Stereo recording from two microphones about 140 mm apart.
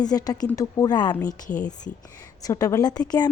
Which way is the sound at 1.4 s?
65° left (ahead or behind).